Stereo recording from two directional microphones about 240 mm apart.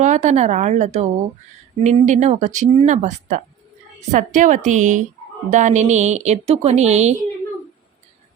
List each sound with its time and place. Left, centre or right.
0.0 s a woman's voice: right